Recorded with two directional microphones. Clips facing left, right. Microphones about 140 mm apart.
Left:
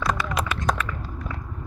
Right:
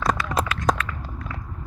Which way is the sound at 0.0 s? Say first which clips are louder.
Right 2 dB; 35° right (ahead or behind).